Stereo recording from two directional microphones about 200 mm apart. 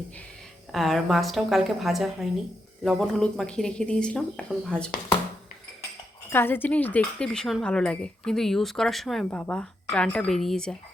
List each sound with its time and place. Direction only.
0.7 s speech: centre (ahead or behind)
6.3 s speech: 10° left (ahead or behind)